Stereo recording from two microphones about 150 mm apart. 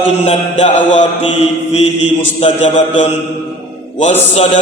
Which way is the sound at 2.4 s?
45° left (ahead or behind).